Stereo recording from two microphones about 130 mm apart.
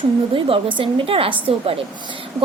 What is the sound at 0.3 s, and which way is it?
A woman's voice, 45° right (ahead or behind).